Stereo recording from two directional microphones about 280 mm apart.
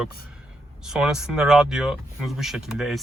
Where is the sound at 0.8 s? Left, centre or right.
Centre.